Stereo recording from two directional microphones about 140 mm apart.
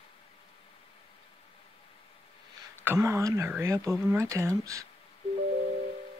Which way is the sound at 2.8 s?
20° right (ahead or behind).